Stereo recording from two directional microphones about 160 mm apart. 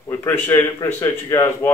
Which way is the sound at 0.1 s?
15° left (ahead or behind).